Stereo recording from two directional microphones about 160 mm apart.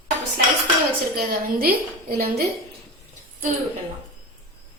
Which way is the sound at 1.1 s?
65° right (ahead or behind).